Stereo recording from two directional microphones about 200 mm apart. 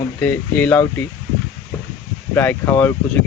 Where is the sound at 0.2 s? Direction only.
5° left (ahead or behind).